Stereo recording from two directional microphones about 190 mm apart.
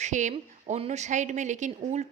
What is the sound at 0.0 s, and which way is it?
A woman's voice, 40° right (ahead or behind).